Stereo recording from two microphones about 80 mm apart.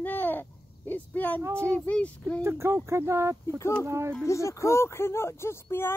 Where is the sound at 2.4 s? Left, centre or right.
Right.